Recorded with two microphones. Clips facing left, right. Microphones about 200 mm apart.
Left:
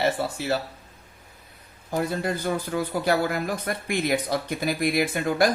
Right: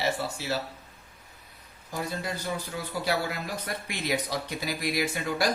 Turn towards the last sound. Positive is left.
turn(degrees=55)  # may be behind; listen again after turning